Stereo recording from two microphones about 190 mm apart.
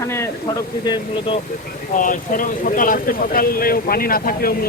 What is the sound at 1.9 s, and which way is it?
Speech, 45° left (ahead or behind).